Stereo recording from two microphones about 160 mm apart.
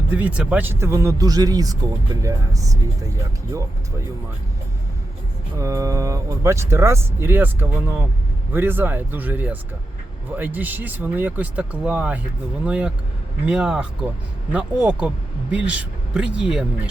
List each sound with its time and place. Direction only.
0.1 s speech: 10° right (ahead or behind)
5.5 s speech: 20° right (ahead or behind); by 16.9 s 5° right (ahead or behind)